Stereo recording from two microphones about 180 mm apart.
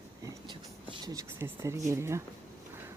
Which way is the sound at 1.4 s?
15° right (ahead or behind).